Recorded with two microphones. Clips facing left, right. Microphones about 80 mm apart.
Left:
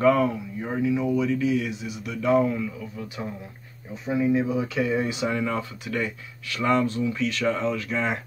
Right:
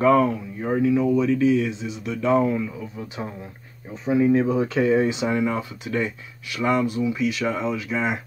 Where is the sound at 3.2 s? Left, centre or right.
Right.